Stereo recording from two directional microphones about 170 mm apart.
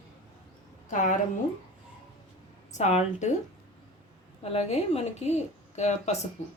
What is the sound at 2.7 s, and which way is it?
Speech, 45° left (ahead or behind).